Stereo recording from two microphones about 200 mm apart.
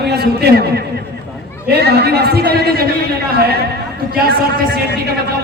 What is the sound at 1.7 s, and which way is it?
A man's voice, 55° right (ahead or behind).